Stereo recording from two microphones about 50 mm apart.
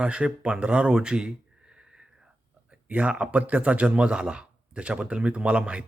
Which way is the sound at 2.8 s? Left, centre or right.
Right.